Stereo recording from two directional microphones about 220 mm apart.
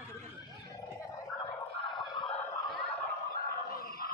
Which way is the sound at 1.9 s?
20° left (ahead or behind).